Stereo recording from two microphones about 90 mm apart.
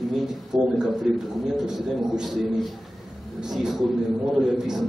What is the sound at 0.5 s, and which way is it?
A man's voice, 5° right (ahead or behind).